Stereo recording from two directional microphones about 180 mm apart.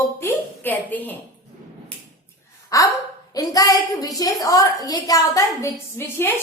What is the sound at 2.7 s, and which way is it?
A woman's voice, 20° left (ahead or behind).